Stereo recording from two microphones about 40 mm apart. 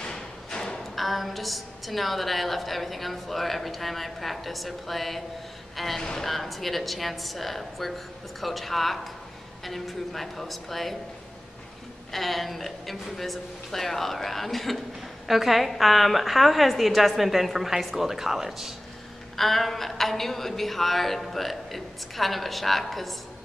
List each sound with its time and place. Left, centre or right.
0.0 s a sound: centre
0.9 s a woman's voice: centre
12.1 s a woman's voice: centre
19.3 s a woman's voice: centre